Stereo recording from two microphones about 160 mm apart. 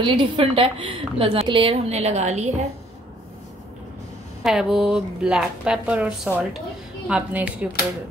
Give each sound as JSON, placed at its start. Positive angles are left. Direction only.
{"t": 0.0, "sound": "a woman's voice", "side_deg": -30}
{"t": 4.4, "sound": "a woman's voice", "side_deg": 0}